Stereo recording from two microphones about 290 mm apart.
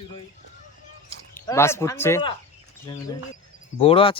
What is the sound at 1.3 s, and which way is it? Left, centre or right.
Speech, centre.